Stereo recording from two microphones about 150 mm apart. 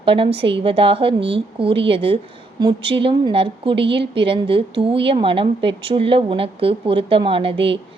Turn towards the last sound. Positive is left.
turn(degrees=-40)  # may be behind; listen again after turning